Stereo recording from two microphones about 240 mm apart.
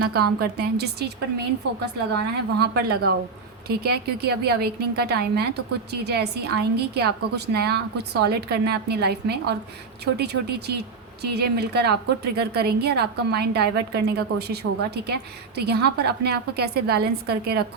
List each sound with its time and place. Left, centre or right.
0.1 s a woman's voice: right